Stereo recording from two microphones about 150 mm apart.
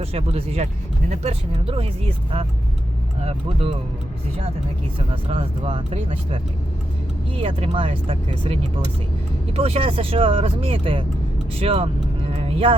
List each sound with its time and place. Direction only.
0.0 s speech: 40° right (ahead or behind)
4.9 s speech: 35° right (ahead or behind)
12.3 s vehicle: 40° right (ahead or behind)